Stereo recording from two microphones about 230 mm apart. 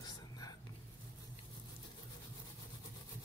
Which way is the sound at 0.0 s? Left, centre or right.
Centre.